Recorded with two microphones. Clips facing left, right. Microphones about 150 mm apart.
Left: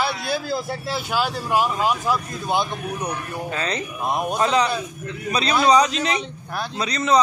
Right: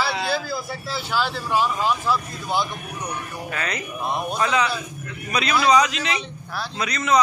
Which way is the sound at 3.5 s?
30° left (ahead or behind).